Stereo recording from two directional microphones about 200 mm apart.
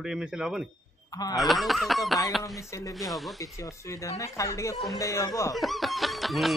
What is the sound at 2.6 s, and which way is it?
Speech, 15° left (ahead or behind).